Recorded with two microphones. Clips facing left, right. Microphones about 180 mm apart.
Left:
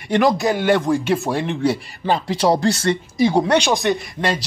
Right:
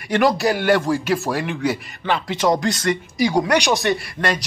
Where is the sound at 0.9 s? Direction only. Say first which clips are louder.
Left 2 dB; centre (ahead or behind).